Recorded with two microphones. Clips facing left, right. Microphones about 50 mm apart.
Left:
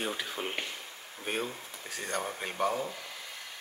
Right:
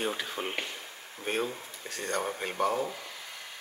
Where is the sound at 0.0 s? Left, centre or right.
Centre.